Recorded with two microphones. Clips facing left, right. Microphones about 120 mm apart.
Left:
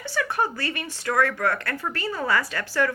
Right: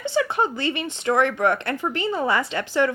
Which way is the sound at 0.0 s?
20° right (ahead or behind).